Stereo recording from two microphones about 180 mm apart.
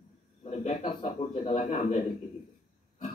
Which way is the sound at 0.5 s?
35° left (ahead or behind).